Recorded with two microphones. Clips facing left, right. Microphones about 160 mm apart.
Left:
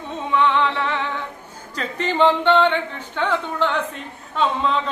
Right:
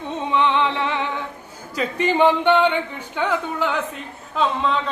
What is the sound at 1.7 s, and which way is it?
Speech, 10° right (ahead or behind).